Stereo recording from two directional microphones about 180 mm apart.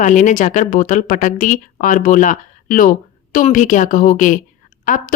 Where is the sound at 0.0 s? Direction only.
45° left (ahead or behind).